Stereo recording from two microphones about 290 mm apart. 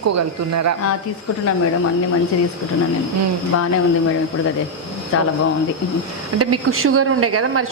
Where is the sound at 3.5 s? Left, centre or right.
Left.